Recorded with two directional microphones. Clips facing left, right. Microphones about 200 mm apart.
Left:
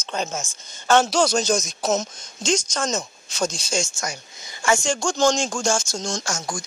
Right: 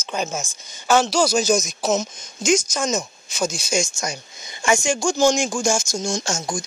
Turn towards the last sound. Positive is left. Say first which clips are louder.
# right 3 dB
turn(degrees=-25)  # may be behind; listen again after turning